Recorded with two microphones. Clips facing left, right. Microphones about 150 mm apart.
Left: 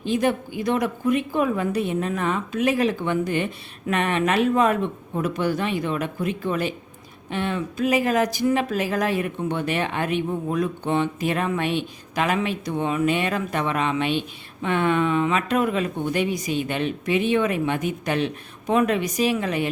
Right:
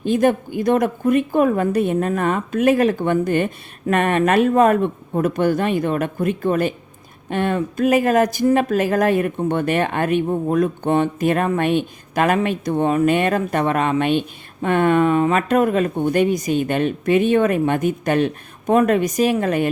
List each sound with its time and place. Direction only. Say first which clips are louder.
0.0 s speech: right 5 dB; 50° right (ahead or behind)